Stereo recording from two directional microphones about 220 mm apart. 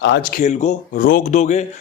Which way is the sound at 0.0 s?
50° left (ahead or behind).